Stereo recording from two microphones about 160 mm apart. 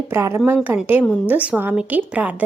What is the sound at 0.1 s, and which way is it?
Speech, 15° right (ahead or behind).